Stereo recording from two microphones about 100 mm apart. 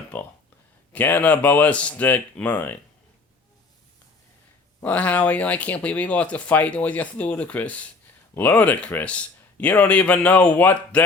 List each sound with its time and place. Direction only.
0.1 s speech: 15° left (ahead or behind)
4.8 s speech: 15° left (ahead or behind)